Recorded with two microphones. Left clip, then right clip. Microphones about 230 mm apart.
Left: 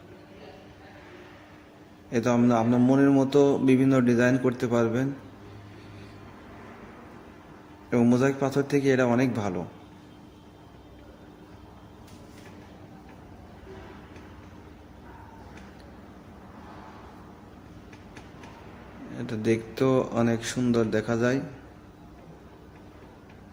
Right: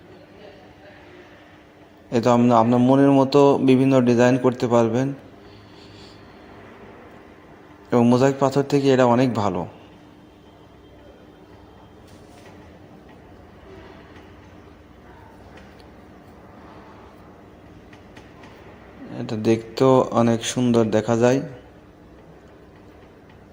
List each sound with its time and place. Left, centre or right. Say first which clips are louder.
2.1 s a man's voice: right 7 dB; centre
7.9 s a man's voice: right 6 dB; centre
19.1 s a sound: right 5 dB; centre
20.1 s speech: right 7 dB; centre